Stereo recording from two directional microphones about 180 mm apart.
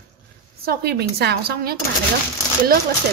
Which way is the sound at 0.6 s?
60° right (ahead or behind).